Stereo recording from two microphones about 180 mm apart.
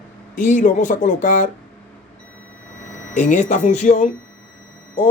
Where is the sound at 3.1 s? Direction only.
45° left (ahead or behind).